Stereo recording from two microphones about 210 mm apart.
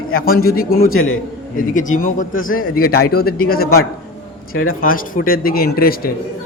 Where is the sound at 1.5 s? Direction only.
40° left (ahead or behind).